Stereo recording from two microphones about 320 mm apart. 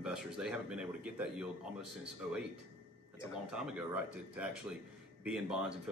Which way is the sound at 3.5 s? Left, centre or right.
Centre.